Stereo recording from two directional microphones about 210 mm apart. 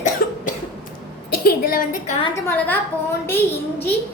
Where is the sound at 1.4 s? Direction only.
45° left (ahead or behind).